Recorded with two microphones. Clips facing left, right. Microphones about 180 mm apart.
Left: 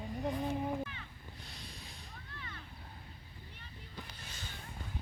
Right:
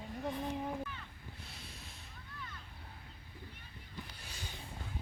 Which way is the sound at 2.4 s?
70° left (ahead or behind).